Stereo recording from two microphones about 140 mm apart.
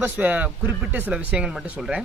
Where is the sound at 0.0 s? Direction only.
10° right (ahead or behind).